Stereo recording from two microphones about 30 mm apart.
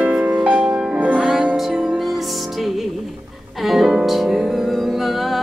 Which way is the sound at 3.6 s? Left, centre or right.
Centre.